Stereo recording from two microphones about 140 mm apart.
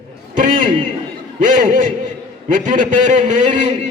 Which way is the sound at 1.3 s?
70° right (ahead or behind).